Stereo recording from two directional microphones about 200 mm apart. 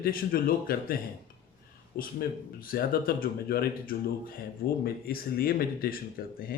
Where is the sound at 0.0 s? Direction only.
45° left (ahead or behind).